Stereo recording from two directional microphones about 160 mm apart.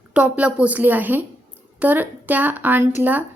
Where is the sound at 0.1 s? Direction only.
10° right (ahead or behind).